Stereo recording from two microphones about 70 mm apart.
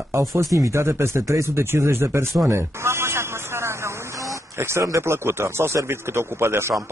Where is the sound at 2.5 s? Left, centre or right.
Right.